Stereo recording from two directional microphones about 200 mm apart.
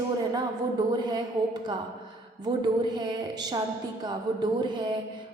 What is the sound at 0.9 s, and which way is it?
Speech, 20° right (ahead or behind).